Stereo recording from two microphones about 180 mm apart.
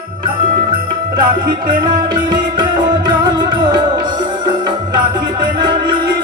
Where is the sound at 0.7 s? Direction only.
25° right (ahead or behind).